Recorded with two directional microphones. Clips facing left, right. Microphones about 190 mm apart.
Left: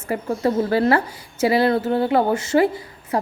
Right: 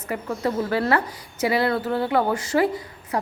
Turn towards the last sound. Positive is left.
turn(degrees=25)  # may be behind; listen again after turning